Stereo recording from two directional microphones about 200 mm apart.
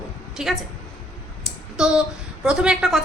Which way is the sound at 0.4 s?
5° right (ahead or behind).